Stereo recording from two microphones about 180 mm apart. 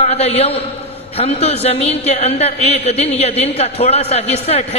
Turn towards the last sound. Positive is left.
turn(degrees=35)  # may be behind; listen again after turning